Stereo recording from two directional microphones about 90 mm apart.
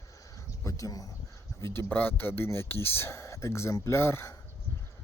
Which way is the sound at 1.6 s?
30° left (ahead or behind).